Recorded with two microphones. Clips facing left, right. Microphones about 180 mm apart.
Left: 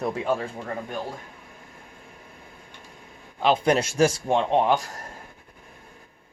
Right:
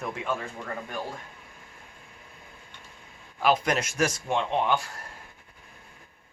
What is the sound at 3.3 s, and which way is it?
Speech, 25° left (ahead or behind).